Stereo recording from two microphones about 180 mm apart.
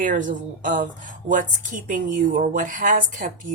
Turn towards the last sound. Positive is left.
turn(degrees=-45)  # may be behind; listen again after turning